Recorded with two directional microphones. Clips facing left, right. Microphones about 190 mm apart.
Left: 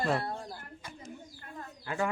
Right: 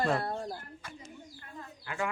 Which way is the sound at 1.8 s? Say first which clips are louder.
Left 3 dB; 35° left (ahead or behind).